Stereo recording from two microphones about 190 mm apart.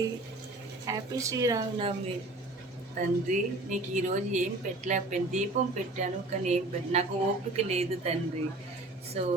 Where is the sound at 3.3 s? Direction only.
40° right (ahead or behind).